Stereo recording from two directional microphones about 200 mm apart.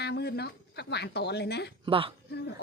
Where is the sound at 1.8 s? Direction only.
25° right (ahead or behind).